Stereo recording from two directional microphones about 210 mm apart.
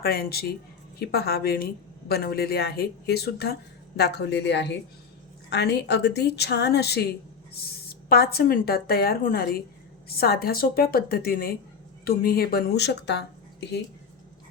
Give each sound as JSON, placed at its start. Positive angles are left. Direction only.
{"t": 0.0, "sound": "speech", "side_deg": 45}